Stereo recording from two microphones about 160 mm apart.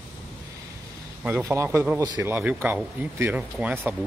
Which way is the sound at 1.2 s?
10° right (ahead or behind).